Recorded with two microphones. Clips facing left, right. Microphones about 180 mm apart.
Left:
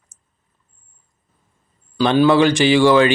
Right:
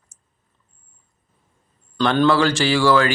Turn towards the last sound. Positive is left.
turn(degrees=20)  # may be behind; listen again after turning